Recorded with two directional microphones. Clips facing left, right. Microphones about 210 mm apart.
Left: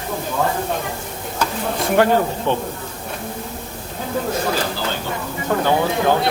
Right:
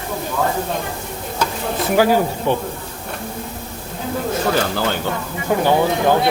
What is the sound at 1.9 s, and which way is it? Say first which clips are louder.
Speech: right 1 dB; 5° right (ahead or behind).